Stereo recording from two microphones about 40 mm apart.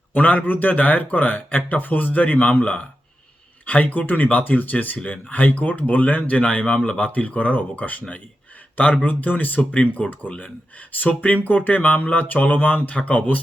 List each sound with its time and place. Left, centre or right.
0.1 s speech: left
4.0 s speech: left
11.4 s speech: left